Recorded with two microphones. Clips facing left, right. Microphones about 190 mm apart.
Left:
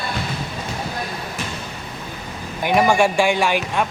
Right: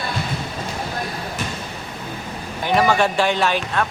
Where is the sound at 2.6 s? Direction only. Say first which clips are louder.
Left 1 dB; 15° left (ahead or behind).